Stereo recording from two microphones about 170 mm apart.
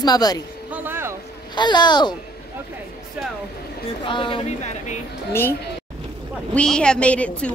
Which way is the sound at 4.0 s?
30° left (ahead or behind).